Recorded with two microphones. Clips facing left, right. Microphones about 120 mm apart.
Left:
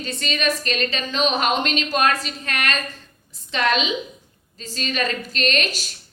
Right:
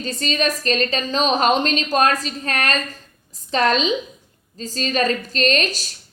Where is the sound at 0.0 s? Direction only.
40° right (ahead or behind).